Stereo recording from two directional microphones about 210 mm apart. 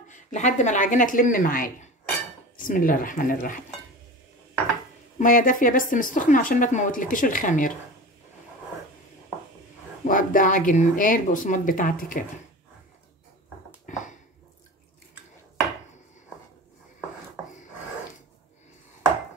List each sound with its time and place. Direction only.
0.1 s a woman's voice: 35° left (ahead or behind)
5.2 s a woman's voice: 40° left (ahead or behind)
10.0 s a woman's voice: 40° left (ahead or behind)
13.8 s a sound: 35° left (ahead or behind)